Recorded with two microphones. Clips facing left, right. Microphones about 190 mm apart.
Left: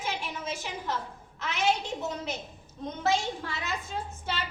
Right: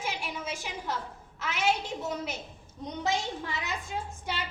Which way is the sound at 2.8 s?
15° right (ahead or behind).